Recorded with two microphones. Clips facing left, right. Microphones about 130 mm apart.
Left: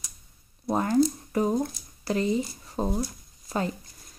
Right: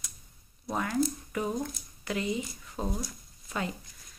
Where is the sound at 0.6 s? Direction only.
35° left (ahead or behind).